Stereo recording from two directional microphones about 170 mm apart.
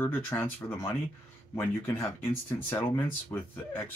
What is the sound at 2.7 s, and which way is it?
Speech, 10° left (ahead or behind).